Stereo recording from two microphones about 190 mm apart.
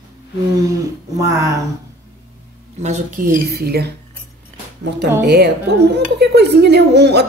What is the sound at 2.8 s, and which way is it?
A woman's voice, 40° right (ahead or behind).